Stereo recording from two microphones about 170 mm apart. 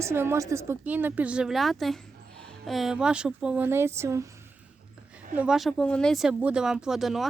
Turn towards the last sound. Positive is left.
turn(degrees=0)  # may be behind; listen again after turning